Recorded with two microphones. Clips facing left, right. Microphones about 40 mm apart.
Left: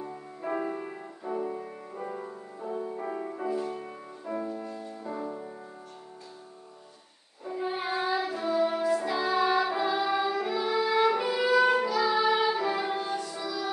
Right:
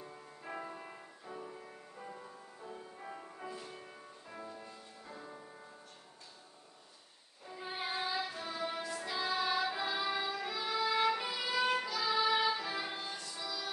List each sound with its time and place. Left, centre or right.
0.0 s music: left
7.6 s child singing: centre
8.5 s music: centre